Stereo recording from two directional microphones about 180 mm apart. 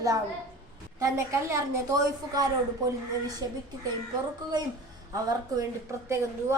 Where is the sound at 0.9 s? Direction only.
15° right (ahead or behind).